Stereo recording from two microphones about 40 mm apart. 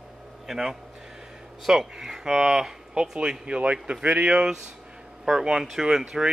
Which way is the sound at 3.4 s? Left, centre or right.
Right.